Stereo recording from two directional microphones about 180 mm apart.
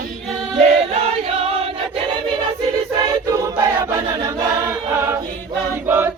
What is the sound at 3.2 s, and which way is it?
Choir, 20° right (ahead or behind).